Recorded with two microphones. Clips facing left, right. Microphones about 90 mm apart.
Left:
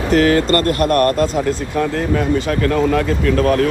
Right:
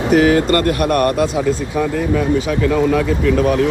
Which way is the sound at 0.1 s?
10° right (ahead or behind).